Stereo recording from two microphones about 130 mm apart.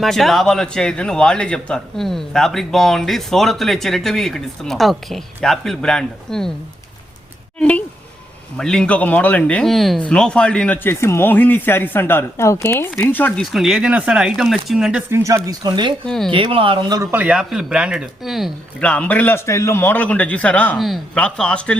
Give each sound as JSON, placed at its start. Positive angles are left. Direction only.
{"t": 0.0, "sound": "a man's voice", "side_deg": 0}
{"t": 7.6, "sound": "speech", "side_deg": 10}
{"t": 13.4, "sound": "a man's voice", "side_deg": 0}
{"t": 15.1, "sound": "speech", "side_deg": -25}
{"t": 16.0, "sound": "a man's voice", "side_deg": 5}
{"t": 16.3, "sound": "speech", "side_deg": -40}
{"t": 17.0, "sound": "speech", "side_deg": -15}
{"t": 18.8, "sound": "speech", "side_deg": 10}